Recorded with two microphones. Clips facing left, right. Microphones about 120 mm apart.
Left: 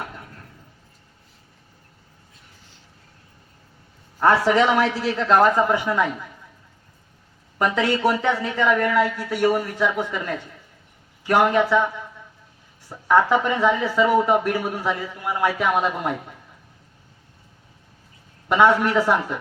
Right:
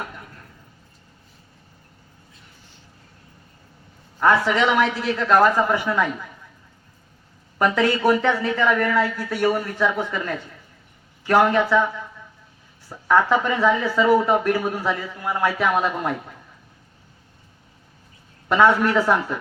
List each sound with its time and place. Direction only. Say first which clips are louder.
4.2 s a man's voice: left 1 dB; 35° left (ahead or behind); by 6.1 s 15° left (ahead or behind)
7.6 s speech: right 1 dB; 15° left (ahead or behind)
12.9 s speech: left 1 dB; 15° left (ahead or behind)
18.4 s speech: even; 15° left (ahead or behind)